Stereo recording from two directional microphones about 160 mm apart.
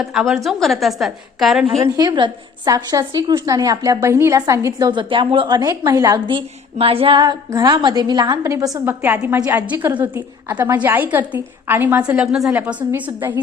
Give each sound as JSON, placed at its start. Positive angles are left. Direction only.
{"t": 0.0, "sound": "a woman's voice", "side_deg": 0}
{"t": 2.0, "sound": "a woman's voice", "side_deg": -30}
{"t": 4.9, "sound": "a woman's voice", "side_deg": -30}